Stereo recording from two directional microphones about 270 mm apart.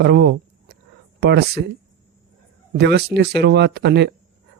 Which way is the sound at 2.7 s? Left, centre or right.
Right.